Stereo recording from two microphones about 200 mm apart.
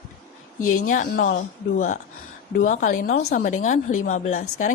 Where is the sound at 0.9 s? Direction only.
40° left (ahead or behind).